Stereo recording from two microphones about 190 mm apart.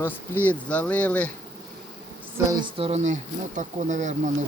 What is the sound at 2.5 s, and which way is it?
Speech, 25° right (ahead or behind).